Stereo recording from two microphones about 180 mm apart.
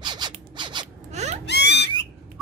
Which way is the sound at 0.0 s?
25° right (ahead or behind).